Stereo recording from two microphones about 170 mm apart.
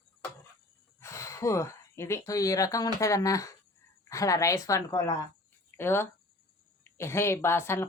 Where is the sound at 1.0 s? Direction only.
15° left (ahead or behind).